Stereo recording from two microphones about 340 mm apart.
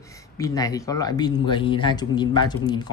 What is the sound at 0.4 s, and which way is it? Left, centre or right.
Speech, centre.